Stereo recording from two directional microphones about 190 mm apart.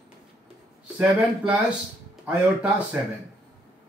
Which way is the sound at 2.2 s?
5° right (ahead or behind).